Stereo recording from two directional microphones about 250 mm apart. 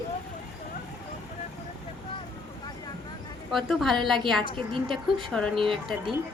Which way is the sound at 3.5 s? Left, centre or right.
Centre.